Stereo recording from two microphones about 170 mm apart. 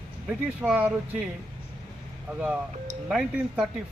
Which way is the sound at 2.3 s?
10° right (ahead or behind).